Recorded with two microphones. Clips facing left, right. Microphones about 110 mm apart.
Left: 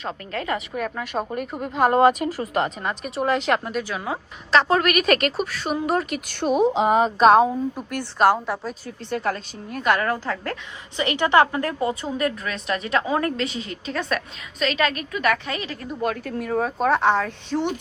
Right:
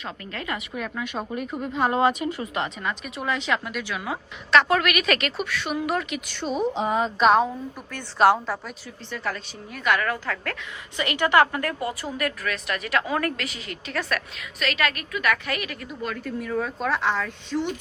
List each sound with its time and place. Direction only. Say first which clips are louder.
0.0 s a woman's voice: left 5 dB; 40° left (ahead or behind)
1.0 s a woman's voice: left 4 dB; centre (ahead or behind)
1.6 s speech: left 5 dB; 50° left (ahead or behind); by 7.1 s 75° left (ahead or behind)
7.2 s a woman's voice: left 4 dB; 40° left (ahead or behind)
8.2 s a woman's voice: even; centre (ahead or behind)
9.0 s a woman's voice: left 6 dB; 50° left (ahead or behind); by 16.0 s 30° left (ahead or behind)
16.0 s speech: left 5 dB; 60° left (ahead or behind)
17.2 s speech: left 3 dB; 70° left (ahead or behind)